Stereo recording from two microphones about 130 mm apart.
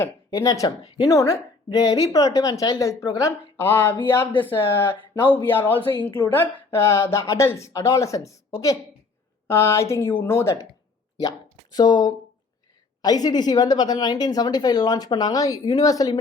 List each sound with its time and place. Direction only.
0.0 s speech: 25° left (ahead or behind)
3.6 s speech: 15° left (ahead or behind)
6.0 s a woman's voice: 40° left (ahead or behind)
6.2 s speech: 15° left (ahead or behind)
11.2 s a woman's voice: 30° left (ahead or behind)